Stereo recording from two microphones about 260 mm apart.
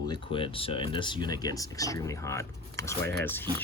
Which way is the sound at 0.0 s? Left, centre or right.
Centre.